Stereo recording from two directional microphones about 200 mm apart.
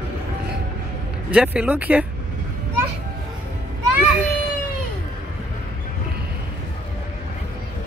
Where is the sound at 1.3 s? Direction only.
5° right (ahead or behind).